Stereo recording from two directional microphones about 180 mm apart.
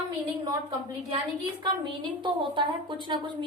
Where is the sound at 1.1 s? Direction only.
25° right (ahead or behind).